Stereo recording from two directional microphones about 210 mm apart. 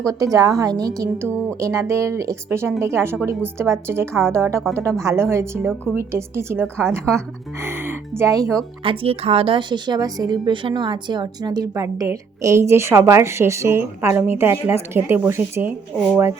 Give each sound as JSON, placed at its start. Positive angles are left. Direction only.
{"t": 0.0, "sound": "a woman's voice", "side_deg": -15}